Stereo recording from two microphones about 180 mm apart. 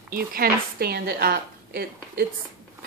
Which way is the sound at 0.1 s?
55° right (ahead or behind).